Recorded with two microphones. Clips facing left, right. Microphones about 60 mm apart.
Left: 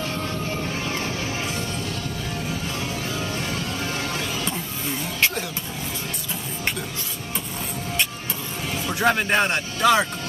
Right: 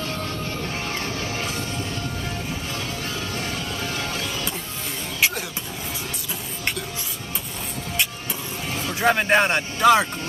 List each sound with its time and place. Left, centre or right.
0.0 s music: left
2.8 s music: left
9.0 s speech: centre